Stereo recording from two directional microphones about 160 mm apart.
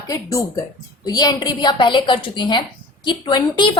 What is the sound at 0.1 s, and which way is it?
A woman's voice, 20° left (ahead or behind).